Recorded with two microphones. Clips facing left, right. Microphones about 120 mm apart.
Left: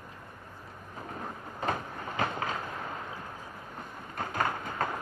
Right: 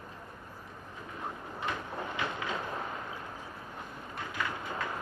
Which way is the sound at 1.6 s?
40° left (ahead or behind).